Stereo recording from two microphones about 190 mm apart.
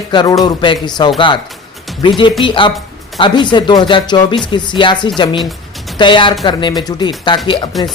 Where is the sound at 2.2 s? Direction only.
25° left (ahead or behind).